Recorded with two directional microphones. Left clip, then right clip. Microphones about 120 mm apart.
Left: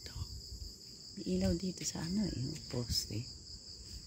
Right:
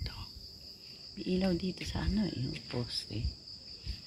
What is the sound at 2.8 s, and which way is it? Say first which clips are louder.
Cricket: even; 35° left (ahead or behind).